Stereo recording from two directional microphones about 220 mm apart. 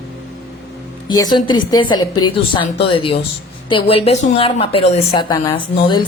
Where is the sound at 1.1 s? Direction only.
20° left (ahead or behind).